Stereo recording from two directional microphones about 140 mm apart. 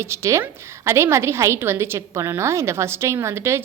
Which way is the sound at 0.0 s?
20° right (ahead or behind).